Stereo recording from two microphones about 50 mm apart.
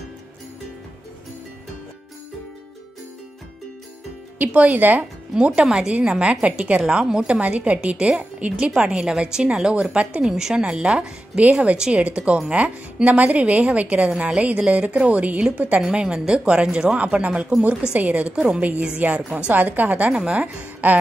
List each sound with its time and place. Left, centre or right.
4.5 s a woman's voice: right
5.3 s a woman's voice: centre
6.8 s a woman's voice: centre
10.2 s a woman's voice: centre
11.4 s a woman's voice: right
15.8 s a woman's voice: centre; by 20.1 s right
20.1 s a woman's voice: centre
20.3 s a woman's voice: right